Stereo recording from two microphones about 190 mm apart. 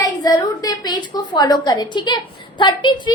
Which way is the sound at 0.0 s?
20° left (ahead or behind).